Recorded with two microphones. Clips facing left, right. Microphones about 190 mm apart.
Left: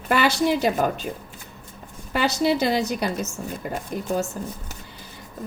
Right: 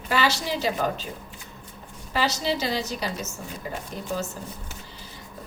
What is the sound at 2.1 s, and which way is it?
A woman's voice, 55° left (ahead or behind).